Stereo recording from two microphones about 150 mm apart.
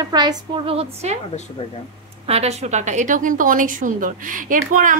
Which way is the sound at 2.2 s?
45° right (ahead or behind).